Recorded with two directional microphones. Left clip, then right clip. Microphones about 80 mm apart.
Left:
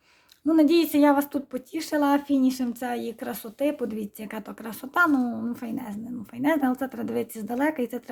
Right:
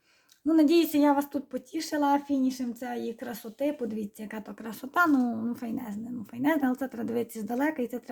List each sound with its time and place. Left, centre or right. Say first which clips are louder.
0.4 s speech: left 2 dB; centre
0.9 s a woman's voice: left 4 dB; left
2.0 s speech: left 3 dB; left
3.7 s a woman's voice: left 3 dB; left
4.6 s speech: left 3 dB; centre
4.9 s a woman's voice: left 2 dB; centre
7.7 s speech: left 3 dB; centre